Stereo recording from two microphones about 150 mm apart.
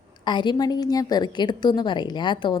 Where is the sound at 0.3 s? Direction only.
30° left (ahead or behind).